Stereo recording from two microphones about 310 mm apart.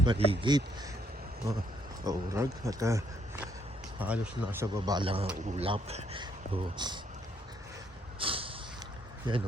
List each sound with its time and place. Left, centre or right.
0.0 s speech: centre
2.0 s speech: centre
8.2 s a sound: centre
9.3 s speech: centre